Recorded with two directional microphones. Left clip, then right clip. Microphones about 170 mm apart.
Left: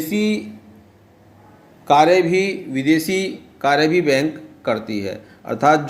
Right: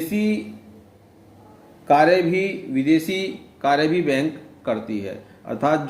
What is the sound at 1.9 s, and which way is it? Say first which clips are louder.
A man's voice: left 3 dB; 45° left (ahead or behind).